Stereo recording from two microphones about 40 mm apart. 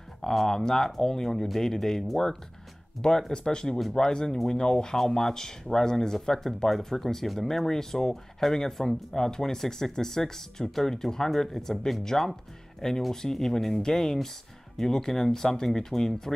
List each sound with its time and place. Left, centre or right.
0.2 s speech: centre